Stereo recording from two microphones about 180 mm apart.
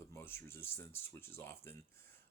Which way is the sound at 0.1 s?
10° left (ahead or behind).